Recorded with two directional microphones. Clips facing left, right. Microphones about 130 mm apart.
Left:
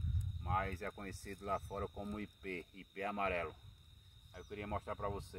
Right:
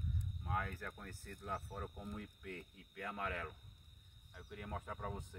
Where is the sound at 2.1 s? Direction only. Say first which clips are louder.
Left 4 dB; 75° left (ahead or behind).